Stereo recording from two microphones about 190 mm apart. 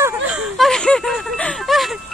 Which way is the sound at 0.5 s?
Centre (ahead or behind).